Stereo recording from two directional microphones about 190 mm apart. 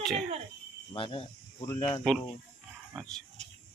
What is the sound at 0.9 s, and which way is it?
Speech, 25° left (ahead or behind).